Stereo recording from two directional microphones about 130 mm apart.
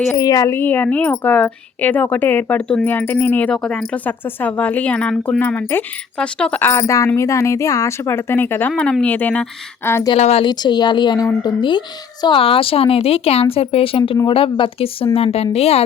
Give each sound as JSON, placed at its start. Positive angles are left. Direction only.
{"t": 0.2, "sound": "a woman's voice", "side_deg": 25}
{"t": 10.2, "sound": "a woman's voice", "side_deg": 50}
{"t": 10.4, "sound": "a woman's voice", "side_deg": 35}